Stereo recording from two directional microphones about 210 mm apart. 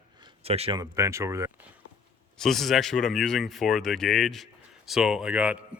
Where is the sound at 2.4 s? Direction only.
Centre (ahead or behind).